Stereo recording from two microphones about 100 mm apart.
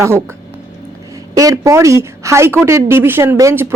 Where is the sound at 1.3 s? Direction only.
35° right (ahead or behind).